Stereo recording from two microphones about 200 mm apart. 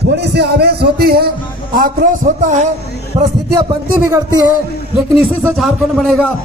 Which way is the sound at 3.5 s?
15° right (ahead or behind).